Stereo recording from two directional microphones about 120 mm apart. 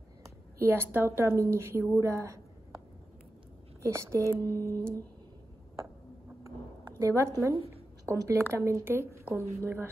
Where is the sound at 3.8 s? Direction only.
25° right (ahead or behind).